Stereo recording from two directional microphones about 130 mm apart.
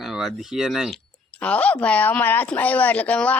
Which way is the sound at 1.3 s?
10° left (ahead or behind).